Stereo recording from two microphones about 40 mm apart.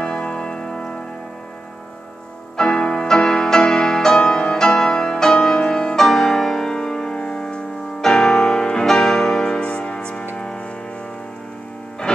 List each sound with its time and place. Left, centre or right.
0.0 s music: centre
2.5 s music: centre